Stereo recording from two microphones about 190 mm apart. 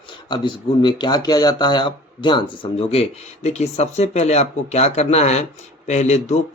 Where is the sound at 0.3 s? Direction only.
25° left (ahead or behind).